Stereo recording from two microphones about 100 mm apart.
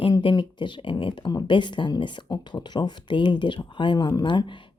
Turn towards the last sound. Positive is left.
turn(degrees=50)  # may be behind; listen again after turning